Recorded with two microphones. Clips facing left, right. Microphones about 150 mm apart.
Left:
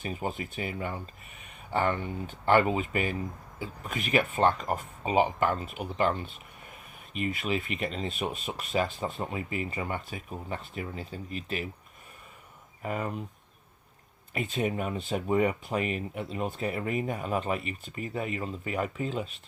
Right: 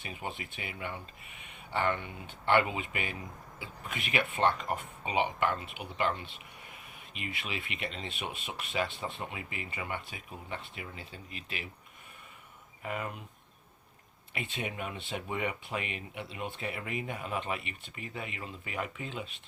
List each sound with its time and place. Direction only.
0.0 s speech: 40° left (ahead or behind)
12.8 s speech: 40° left (ahead or behind)
14.3 s speech: 40° left (ahead or behind)